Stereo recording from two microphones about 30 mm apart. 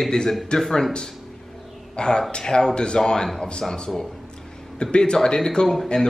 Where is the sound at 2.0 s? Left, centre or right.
Left.